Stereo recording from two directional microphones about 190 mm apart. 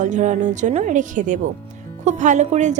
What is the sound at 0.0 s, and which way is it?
A woman's voice, 40° right (ahead or behind).